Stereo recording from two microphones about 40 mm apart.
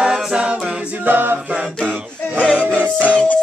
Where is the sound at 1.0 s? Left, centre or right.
Right.